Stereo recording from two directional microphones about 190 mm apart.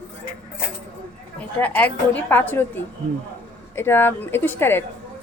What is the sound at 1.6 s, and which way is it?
A woman's voice, 10° left (ahead or behind).